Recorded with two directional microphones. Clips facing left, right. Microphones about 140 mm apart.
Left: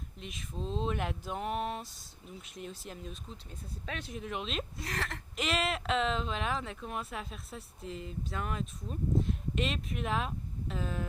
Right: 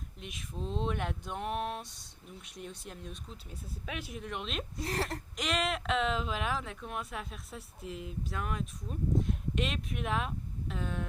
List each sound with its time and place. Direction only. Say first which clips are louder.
0.2 s speech: even; centre (ahead or behind)
4.8 s speech: right 4 dB; 30° right (ahead or behind)
5.4 s speech: left 1 dB; centre (ahead or behind)